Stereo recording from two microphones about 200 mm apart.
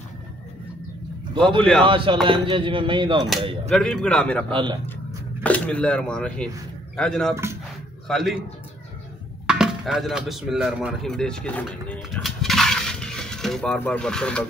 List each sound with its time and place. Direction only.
1.6 s speech: 5° left (ahead or behind)
1.9 s speech: 25° right (ahead or behind)
3.7 s speech: 5° left (ahead or behind)
4.5 s speech: 25° right (ahead or behind)
5.4 s speech: 5° left (ahead or behind)
9.5 s speech: centre (ahead or behind)